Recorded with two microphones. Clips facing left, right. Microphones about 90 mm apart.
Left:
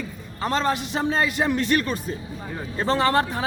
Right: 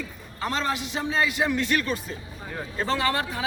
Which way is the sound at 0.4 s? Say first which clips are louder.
Left 4 dB; 40° left (ahead or behind).